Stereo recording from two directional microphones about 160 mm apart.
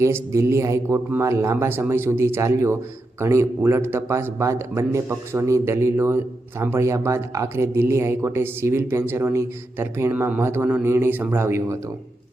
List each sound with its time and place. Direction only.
0.0 s speech: 15° right (ahead or behind)